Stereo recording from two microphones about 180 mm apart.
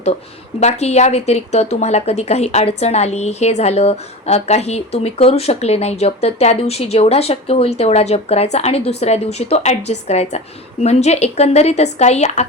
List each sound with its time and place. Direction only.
0.6 s a woman's voice: 35° left (ahead or behind)